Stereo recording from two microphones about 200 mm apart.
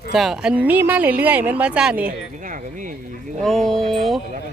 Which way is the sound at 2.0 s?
40° right (ahead or behind).